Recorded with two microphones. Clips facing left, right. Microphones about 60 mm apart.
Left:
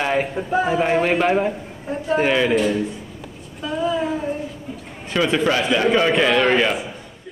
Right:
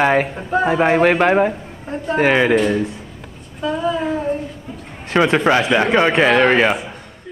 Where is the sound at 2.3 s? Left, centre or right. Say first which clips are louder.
Right 5 dB; right.